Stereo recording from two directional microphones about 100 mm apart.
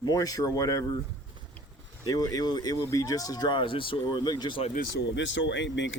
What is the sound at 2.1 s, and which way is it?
Speech, 35° left (ahead or behind).